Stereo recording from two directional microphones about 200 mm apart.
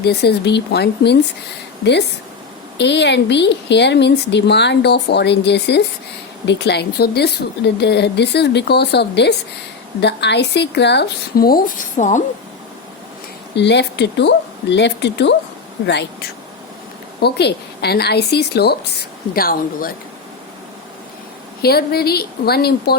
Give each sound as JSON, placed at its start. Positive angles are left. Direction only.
{"t": 0.0, "sound": "a woman's voice", "side_deg": 55}
{"t": 13.6, "sound": "a woman's voice", "side_deg": 60}
{"t": 17.2, "sound": "a woman's voice", "side_deg": 55}
{"t": 21.6, "sound": "a woman's voice", "side_deg": 50}